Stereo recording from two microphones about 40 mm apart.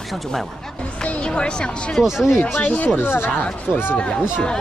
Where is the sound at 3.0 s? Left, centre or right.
Left.